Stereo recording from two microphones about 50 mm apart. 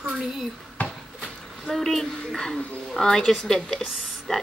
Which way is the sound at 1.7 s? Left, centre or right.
Centre.